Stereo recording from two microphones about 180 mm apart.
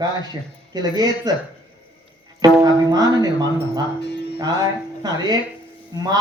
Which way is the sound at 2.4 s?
20° right (ahead or behind).